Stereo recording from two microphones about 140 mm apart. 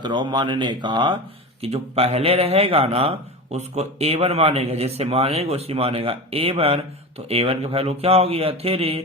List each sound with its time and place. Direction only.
0.0 s speech: 35° right (ahead or behind)
1.6 s a man's voice: 50° right (ahead or behind)